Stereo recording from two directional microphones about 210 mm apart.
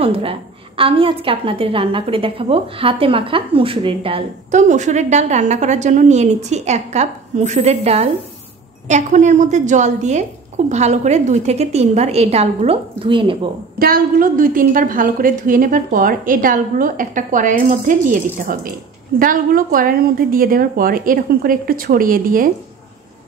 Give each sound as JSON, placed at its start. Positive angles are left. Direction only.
{"t": 0.0, "sound": "a woman's voice", "side_deg": -25}
{"t": 13.7, "sound": "a woman's voice", "side_deg": -45}